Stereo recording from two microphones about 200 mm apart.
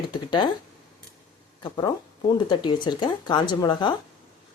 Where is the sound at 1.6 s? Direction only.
20° left (ahead or behind).